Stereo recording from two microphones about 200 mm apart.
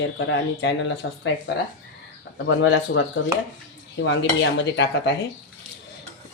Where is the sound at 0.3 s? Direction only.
70° left (ahead or behind).